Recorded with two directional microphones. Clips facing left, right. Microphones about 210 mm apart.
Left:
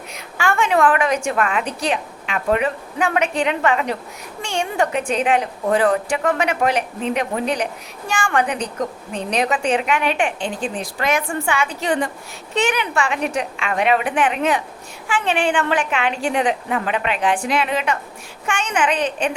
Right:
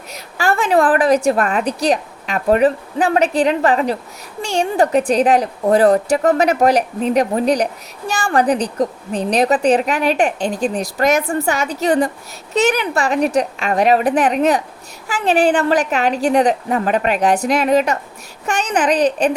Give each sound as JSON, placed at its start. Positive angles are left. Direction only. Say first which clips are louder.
{"t": 0.1, "sound": "a woman's voice", "louder": "right 3 dB", "side_deg": -35}